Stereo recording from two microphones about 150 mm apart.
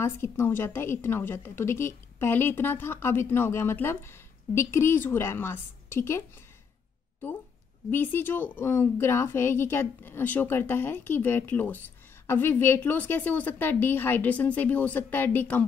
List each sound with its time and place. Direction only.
0.0 s a woman's voice: 15° left (ahead or behind)
7.9 s a woman's voice: 15° left (ahead or behind)